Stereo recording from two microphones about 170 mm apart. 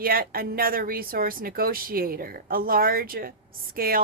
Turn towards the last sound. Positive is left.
turn(degrees=-60)  # may be behind; listen again after turning